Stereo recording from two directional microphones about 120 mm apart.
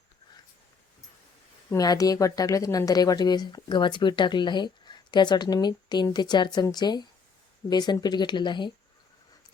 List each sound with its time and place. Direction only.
1.7 s speech: 30° left (ahead or behind)